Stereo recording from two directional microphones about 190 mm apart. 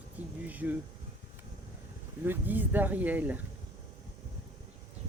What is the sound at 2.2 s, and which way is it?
Speech, 10° right (ahead or behind).